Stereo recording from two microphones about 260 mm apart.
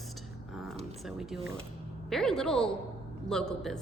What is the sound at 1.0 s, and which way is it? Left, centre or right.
A woman's voice, centre.